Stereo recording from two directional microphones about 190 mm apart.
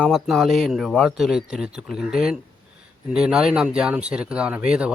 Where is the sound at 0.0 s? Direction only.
Centre (ahead or behind).